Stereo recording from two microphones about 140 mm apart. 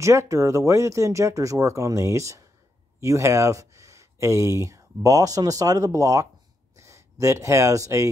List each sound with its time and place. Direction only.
0.0 s speech: 20° right (ahead or behind)